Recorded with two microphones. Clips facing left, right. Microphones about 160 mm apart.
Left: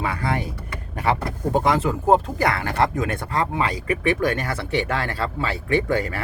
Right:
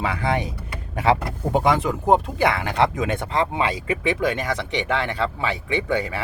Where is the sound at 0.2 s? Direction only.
20° right (ahead or behind).